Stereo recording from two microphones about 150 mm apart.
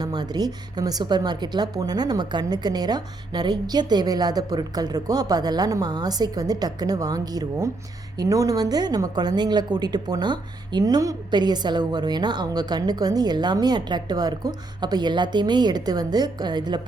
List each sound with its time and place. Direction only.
0.0 s a woman's voice: 25° right (ahead or behind)